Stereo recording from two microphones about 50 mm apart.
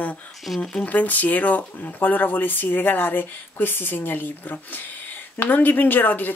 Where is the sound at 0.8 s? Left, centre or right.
Left.